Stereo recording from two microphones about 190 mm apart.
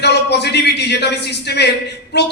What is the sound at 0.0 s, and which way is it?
A man's voice, 60° left (ahead or behind).